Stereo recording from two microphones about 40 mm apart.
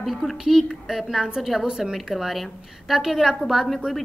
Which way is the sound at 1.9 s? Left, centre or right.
Centre.